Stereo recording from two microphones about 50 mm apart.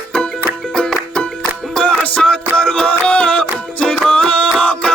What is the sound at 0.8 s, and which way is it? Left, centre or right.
Music, centre.